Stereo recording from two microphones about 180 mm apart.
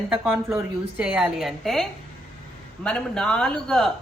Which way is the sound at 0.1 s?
Centre (ahead or behind).